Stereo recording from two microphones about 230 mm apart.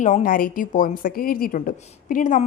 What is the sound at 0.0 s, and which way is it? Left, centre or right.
A woman's voice, left.